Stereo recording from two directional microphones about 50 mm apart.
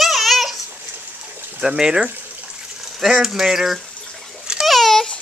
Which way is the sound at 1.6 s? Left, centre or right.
Centre.